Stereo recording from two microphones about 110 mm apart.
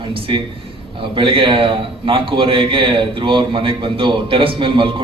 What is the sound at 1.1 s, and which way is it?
A man's voice, 55° right (ahead or behind).